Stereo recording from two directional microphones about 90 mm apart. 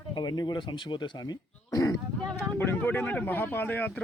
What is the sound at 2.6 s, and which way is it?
Speech, 25° left (ahead or behind).